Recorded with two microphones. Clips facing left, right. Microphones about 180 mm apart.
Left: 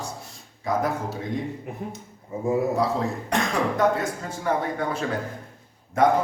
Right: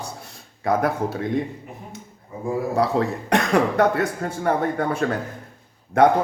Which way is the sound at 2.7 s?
65° right (ahead or behind).